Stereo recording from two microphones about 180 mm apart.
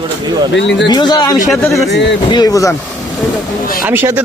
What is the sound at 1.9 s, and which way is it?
Speech, 75° left (ahead or behind).